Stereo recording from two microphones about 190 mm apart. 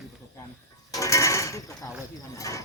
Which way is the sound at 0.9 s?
15° left (ahead or behind).